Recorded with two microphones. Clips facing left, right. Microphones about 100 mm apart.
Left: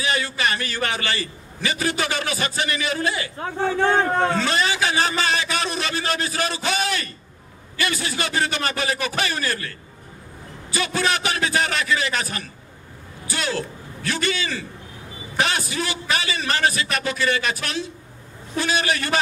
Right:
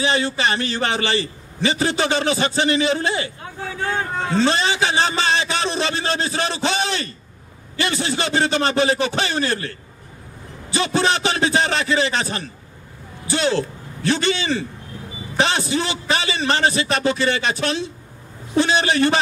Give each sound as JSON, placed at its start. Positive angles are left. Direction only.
{"t": 0.0, "sound": "a man's voice", "side_deg": -25}
{"t": 4.1, "sound": "speech", "side_deg": 55}
{"t": 4.4, "sound": "a man's voice", "side_deg": -25}